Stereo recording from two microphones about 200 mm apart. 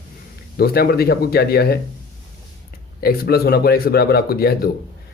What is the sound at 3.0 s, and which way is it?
Speech, 50° left (ahead or behind).